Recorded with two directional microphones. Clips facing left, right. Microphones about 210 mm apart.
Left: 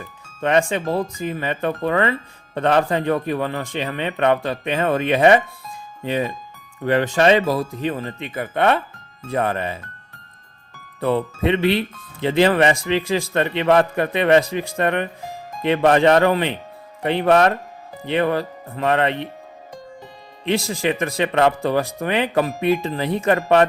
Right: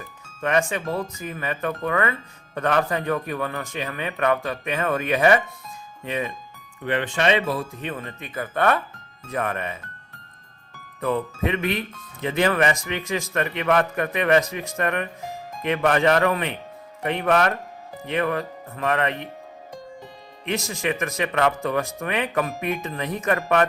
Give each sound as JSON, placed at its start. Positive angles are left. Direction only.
{"t": 0.4, "sound": "a man's voice", "side_deg": 30}
{"t": 11.0, "sound": "speech", "side_deg": 30}
{"t": 20.4, "sound": "speech", "side_deg": 30}